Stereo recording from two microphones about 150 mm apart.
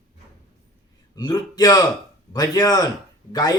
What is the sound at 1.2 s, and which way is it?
Speech, 25° left (ahead or behind).